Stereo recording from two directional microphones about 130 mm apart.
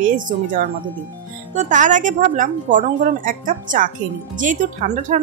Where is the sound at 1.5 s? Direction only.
75° right (ahead or behind).